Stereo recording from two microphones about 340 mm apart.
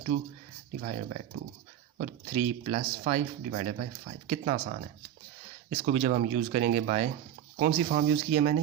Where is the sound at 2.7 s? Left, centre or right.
Right.